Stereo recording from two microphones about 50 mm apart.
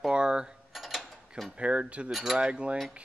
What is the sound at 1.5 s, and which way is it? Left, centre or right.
Speech, right.